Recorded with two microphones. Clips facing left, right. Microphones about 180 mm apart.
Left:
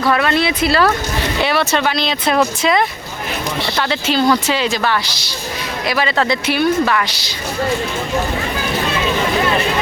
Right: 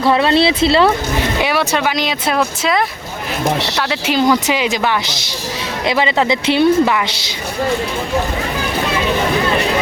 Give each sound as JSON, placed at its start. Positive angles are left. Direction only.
{"t": 0.0, "sound": "speech", "side_deg": -25}
{"t": 1.4, "sound": "speech", "side_deg": -10}